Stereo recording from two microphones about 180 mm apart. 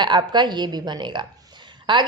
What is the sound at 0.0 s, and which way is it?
A woman's voice, 25° right (ahead or behind).